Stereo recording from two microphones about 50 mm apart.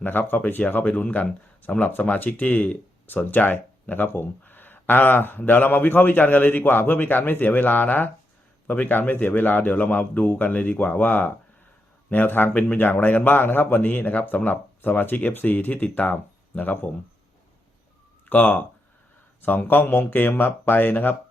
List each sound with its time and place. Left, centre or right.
0.0 s speech: left
12.5 s speech: left
18.3 s speech: left